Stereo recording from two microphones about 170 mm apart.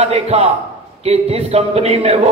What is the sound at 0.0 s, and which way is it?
A man's voice, 35° right (ahead or behind).